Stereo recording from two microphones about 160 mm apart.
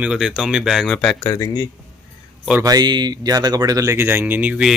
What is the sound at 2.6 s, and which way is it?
Speech, 25° right (ahead or behind).